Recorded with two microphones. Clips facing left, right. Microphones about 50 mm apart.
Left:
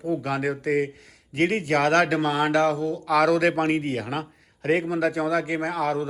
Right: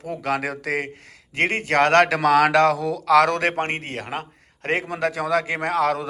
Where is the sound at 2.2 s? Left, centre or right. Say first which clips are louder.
Right 5 dB; right.